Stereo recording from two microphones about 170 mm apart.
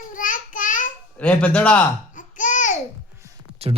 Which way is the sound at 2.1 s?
50° left (ahead or behind).